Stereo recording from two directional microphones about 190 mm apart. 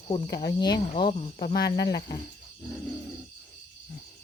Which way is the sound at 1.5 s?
60° left (ahead or behind).